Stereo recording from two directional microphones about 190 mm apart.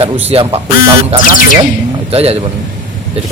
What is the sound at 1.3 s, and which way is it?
Music, 45° left (ahead or behind).